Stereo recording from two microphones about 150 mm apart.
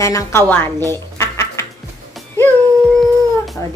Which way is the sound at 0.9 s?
15° left (ahead or behind).